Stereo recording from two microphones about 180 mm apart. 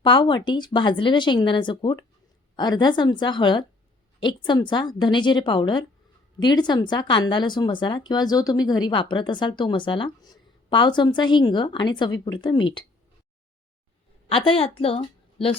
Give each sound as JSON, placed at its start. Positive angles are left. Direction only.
{"t": 0.0, "sound": "speech", "side_deg": 25}
{"t": 14.3, "sound": "a woman's voice", "side_deg": 30}